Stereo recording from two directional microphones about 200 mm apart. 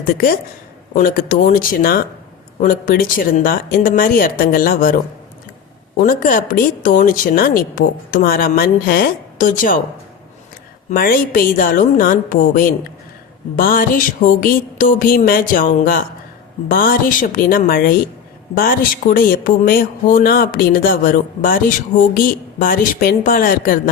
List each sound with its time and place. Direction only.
0.0 s speech: 45° left (ahead or behind)
6.0 s speech: 45° left (ahead or behind)
10.9 s speech: 45° left (ahead or behind)